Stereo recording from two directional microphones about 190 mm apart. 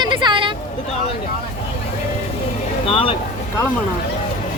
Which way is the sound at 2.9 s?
30° left (ahead or behind).